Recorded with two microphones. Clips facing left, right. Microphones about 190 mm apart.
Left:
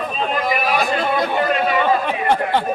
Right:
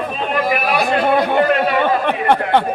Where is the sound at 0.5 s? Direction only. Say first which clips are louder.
Right 2 dB; 60° right (ahead or behind).